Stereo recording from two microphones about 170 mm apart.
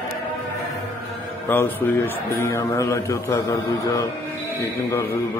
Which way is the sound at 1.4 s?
10° left (ahead or behind).